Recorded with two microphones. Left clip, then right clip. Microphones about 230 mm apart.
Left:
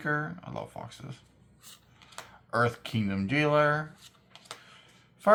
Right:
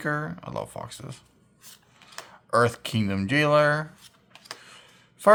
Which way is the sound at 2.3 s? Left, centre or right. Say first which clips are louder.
Right 6 dB; right.